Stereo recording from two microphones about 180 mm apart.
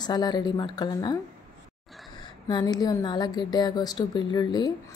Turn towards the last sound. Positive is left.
turn(degrees=25)  # may be behind; listen again after turning